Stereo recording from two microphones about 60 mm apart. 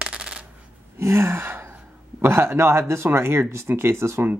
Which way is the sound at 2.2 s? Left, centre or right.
Right.